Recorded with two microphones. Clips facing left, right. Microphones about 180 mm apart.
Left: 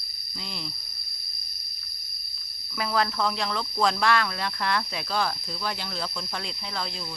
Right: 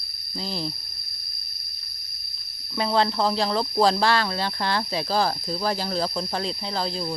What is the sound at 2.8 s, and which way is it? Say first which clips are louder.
Speech: right 4 dB; 30° right (ahead or behind).